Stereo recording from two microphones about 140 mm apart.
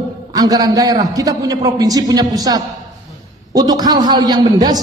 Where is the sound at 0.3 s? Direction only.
25° right (ahead or behind).